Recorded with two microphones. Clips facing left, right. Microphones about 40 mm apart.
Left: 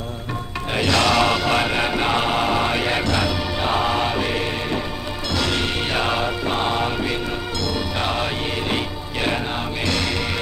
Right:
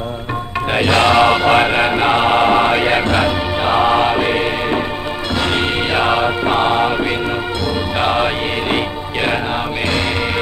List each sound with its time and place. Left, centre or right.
0.7 s chant: right
5.4 s music: right